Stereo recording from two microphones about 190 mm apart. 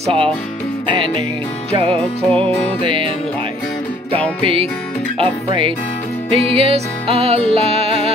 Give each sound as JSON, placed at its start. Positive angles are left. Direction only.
{"t": 0.0, "sound": "music", "side_deg": -30}
{"t": 4.4, "sound": "music", "side_deg": -30}